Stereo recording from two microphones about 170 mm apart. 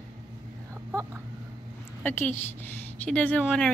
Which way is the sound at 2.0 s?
10° left (ahead or behind).